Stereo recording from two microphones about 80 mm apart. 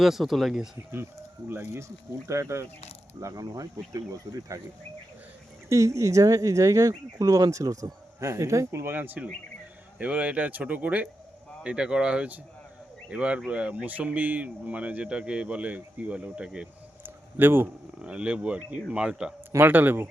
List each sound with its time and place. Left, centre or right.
0.0 s speech: centre
1.5 s speech: right
2.2 s speech: right
5.6 s speech: right; by 16.6 s centre
17.0 s a sound: right
18.0 s speech: centre
19.5 s speech: right